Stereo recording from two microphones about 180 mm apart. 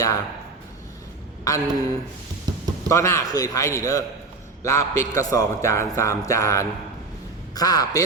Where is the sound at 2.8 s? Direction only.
15° left (ahead or behind).